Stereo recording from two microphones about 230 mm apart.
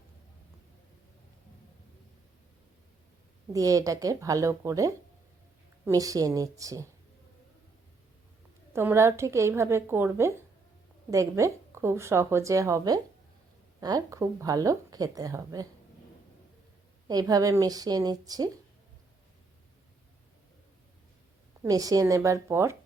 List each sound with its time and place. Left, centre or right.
3.5 s speech: centre
8.7 s speech: centre
17.1 s speech: centre
21.6 s speech: centre